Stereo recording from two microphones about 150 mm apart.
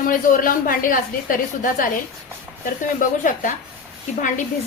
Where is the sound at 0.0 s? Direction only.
65° left (ahead or behind).